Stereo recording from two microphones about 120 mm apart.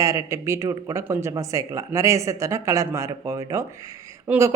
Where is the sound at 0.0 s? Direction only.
25° right (ahead or behind).